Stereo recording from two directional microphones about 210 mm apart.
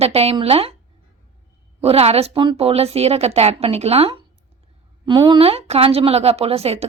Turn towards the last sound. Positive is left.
turn(degrees=-30)  # may be behind; listen again after turning